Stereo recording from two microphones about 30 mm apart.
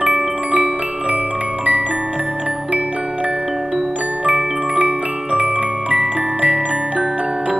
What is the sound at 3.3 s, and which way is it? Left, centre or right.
Glockenspiel, centre.